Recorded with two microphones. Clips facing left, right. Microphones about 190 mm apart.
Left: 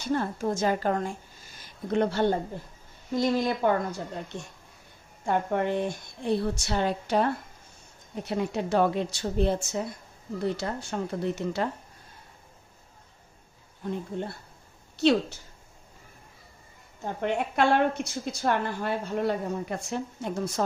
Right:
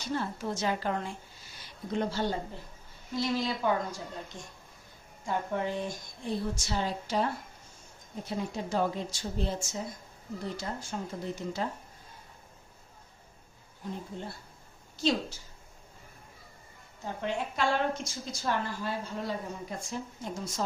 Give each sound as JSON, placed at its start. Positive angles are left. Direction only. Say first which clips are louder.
{"t": 0.1, "sound": "a woman's voice", "louder": "left 6 dB", "side_deg": 50}
{"t": 15.0, "sound": "a woman's voice", "louder": "left 7 dB", "side_deg": 65}
{"t": 17.2, "sound": "a woman's voice", "louder": "left 6 dB", "side_deg": 60}